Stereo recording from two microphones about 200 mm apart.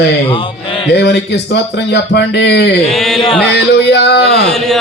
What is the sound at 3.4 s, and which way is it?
Speech, 55° left (ahead or behind).